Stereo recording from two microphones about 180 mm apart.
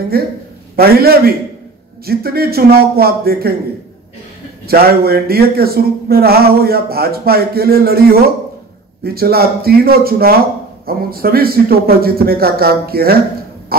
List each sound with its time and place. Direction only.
0.1 s speech: 55° right (ahead or behind)
4.6 s speech: 60° right (ahead or behind)